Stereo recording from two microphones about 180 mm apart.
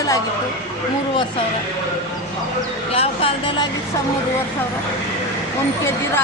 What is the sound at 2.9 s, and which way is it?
Speech, 30° left (ahead or behind).